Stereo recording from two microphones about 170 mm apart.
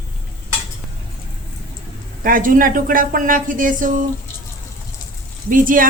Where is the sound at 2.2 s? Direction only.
55° right (ahead or behind).